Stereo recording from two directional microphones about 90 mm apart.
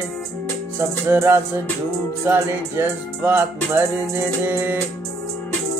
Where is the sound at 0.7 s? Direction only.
30° right (ahead or behind).